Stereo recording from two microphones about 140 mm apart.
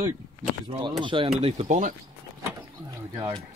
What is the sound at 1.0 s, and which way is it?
Speech, 40° right (ahead or behind).